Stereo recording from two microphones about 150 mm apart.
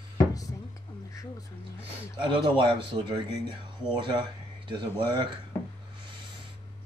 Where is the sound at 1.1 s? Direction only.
20° left (ahead or behind).